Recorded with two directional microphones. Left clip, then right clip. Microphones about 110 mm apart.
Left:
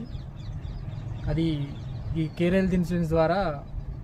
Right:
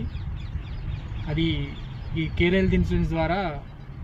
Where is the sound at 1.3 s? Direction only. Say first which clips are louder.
Right 2 dB; 30° left (ahead or behind).